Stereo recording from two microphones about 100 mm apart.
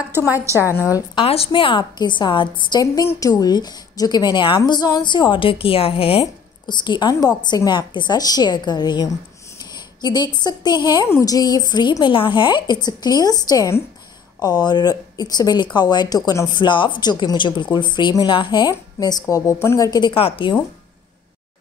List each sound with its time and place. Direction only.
0.1 s a woman's voice: 20° right (ahead or behind)
1.2 s a woman's voice: 75° left (ahead or behind); by 2.8 s 55° left (ahead or behind)
3.2 s speech: 40° left (ahead or behind); by 6.2 s 70° left (ahead or behind)
6.6 s speech: 50° left (ahead or behind)
11.1 s a woman's voice: 35° left (ahead or behind)
20.1 s a woman's voice: 65° left (ahead or behind)